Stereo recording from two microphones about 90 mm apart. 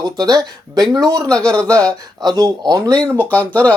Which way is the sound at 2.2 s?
50° right (ahead or behind).